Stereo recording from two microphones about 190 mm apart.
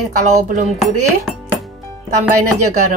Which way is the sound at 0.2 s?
35° right (ahead or behind).